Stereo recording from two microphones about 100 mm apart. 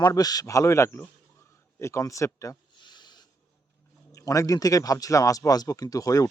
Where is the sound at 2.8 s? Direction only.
45° left (ahead or behind).